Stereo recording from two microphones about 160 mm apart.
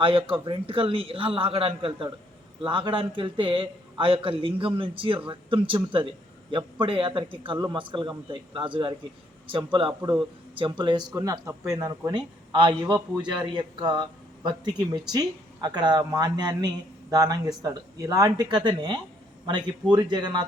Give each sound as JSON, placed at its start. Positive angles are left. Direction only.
{"t": 0.0, "sound": "a man's voice", "side_deg": -35}